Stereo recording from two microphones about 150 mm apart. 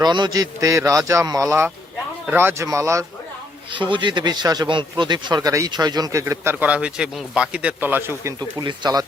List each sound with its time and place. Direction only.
0.0 s speech: 30° right (ahead or behind)
3.7 s speech: 35° right (ahead or behind); by 8.3 s 15° right (ahead or behind)
8.4 s speech: 30° right (ahead or behind)